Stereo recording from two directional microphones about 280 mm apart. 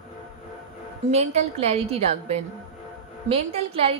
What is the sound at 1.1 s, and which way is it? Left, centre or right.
A woman's voice, right.